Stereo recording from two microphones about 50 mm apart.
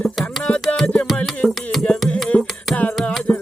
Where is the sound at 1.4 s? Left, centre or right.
Centre.